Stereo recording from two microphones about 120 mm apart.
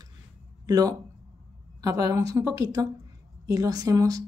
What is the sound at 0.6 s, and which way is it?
Speech, 30° right (ahead or behind).